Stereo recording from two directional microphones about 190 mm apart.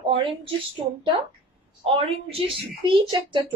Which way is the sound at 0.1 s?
25° right (ahead or behind).